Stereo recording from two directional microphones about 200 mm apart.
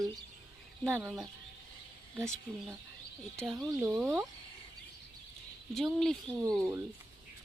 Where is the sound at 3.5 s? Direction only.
10° right (ahead or behind).